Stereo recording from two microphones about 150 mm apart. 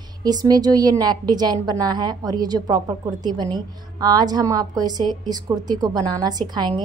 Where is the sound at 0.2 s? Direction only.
25° right (ahead or behind).